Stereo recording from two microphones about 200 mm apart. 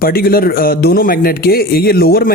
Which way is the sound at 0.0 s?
50° left (ahead or behind).